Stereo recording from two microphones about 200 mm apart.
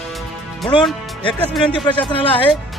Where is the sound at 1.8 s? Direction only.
20° left (ahead or behind).